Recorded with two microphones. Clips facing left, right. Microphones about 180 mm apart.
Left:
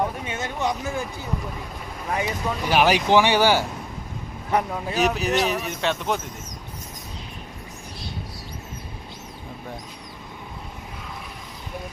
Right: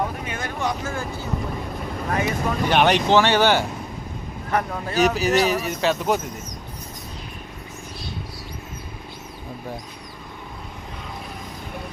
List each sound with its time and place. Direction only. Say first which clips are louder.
0.3 s speech: even; 20° left (ahead or behind)
4.9 s speech: right 4 dB; centre (ahead or behind)